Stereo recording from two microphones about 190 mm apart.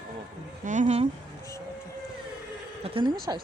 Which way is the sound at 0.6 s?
40° right (ahead or behind).